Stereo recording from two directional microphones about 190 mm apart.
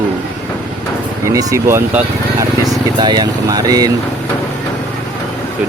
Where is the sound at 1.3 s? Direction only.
15° right (ahead or behind).